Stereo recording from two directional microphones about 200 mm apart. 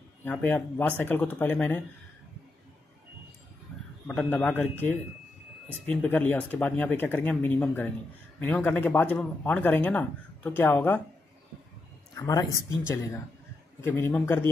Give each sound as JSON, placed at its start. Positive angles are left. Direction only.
{"t": 0.2, "sound": "speech", "side_deg": 10}
{"t": 3.7, "sound": "a sound", "side_deg": 0}
{"t": 4.1, "sound": "speech", "side_deg": 5}
{"t": 12.2, "sound": "speech", "side_deg": 15}